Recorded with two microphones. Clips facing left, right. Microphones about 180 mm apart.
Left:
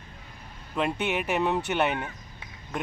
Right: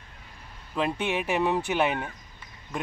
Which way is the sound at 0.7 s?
5° left (ahead or behind).